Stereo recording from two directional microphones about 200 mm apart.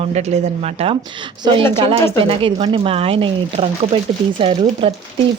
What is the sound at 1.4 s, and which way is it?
Speech, 25° right (ahead or behind).